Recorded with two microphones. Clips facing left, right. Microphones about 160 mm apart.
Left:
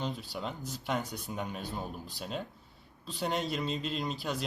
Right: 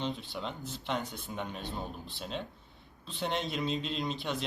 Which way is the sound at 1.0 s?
40° left (ahead or behind).